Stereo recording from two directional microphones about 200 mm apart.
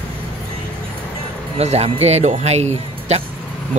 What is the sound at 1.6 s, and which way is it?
Speech, 30° right (ahead or behind).